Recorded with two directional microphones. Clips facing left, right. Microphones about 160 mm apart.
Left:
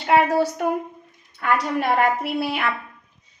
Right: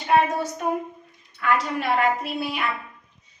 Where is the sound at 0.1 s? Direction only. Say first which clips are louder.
Left 3 dB; 75° left (ahead or behind).